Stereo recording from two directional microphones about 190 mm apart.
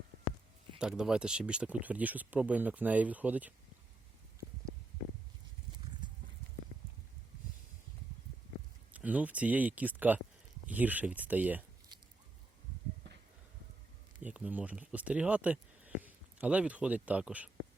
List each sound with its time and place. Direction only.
0.8 s speech: 5° right (ahead or behind)
6.0 s clip-clop: 25° right (ahead or behind)
8.9 s speech: 10° right (ahead or behind)
14.2 s speech: 5° right (ahead or behind)